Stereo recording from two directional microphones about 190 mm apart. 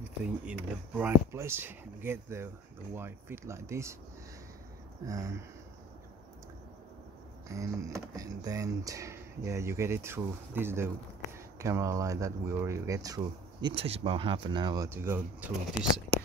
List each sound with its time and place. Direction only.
0.5 s speech: 10° right (ahead or behind)
5.0 s speech: 15° right (ahead or behind)
7.4 s speech: 15° right (ahead or behind)